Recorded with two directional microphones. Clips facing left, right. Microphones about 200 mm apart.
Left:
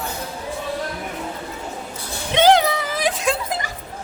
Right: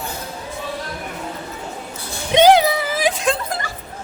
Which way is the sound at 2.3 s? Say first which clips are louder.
Right 3 dB; 15° right (ahead or behind).